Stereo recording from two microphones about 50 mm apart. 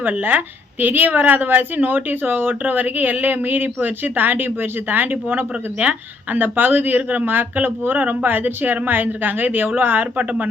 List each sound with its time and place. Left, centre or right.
0.2 s a woman's voice: right